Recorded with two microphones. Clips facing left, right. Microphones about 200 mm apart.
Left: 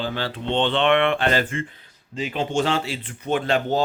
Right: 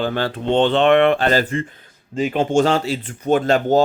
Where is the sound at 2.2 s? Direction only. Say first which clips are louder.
Right 7 dB; 50° right (ahead or behind).